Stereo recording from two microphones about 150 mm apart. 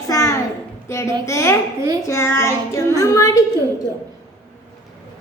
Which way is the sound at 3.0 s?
20° left (ahead or behind).